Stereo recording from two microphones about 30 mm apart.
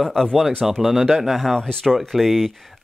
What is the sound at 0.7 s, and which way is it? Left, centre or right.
Speech, centre.